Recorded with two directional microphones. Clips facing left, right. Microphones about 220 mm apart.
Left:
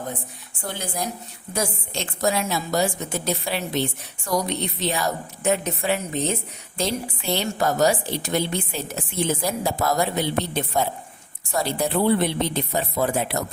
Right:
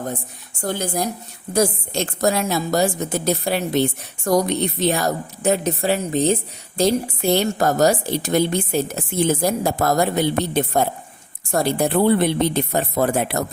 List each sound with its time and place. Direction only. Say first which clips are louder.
0.6 s a woman's voice: right 6 dB; 45° right (ahead or behind)